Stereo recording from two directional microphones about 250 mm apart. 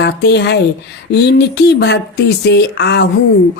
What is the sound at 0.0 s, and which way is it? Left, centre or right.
Speech, left.